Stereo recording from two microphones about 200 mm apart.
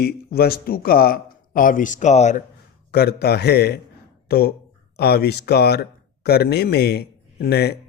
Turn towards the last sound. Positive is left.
turn(degrees=55)  # may be behind; listen again after turning